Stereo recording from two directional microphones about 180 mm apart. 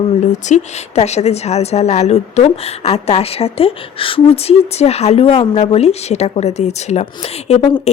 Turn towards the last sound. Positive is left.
turn(degrees=35)  # may be behind; listen again after turning